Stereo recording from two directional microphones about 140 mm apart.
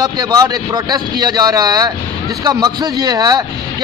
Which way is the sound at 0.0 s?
25° right (ahead or behind).